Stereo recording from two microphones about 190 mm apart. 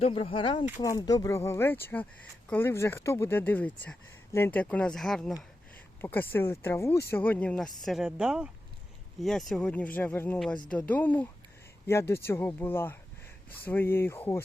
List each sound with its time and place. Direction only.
0.0 s speech: 30° left (ahead or behind); by 14.4 s 10° left (ahead or behind)